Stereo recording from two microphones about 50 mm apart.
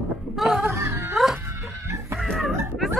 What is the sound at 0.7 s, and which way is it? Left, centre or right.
Music, right.